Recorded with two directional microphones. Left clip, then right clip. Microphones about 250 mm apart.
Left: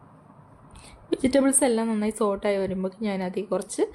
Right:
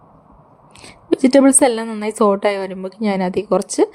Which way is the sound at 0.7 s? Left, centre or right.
Right.